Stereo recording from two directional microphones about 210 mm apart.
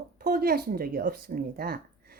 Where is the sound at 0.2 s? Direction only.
45° right (ahead or behind).